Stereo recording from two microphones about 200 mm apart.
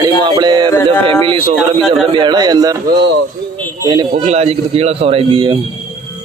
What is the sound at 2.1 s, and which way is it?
Speech, 20° right (ahead or behind).